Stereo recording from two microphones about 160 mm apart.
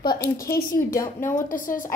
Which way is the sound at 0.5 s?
65° left (ahead or behind).